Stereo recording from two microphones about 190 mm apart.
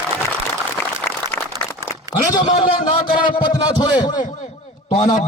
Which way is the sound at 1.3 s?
15° left (ahead or behind).